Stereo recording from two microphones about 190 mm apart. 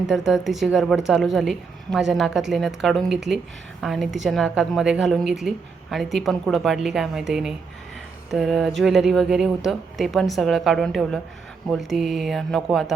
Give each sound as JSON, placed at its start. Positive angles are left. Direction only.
{"t": 0.1, "sound": "a woman's voice", "side_deg": -5}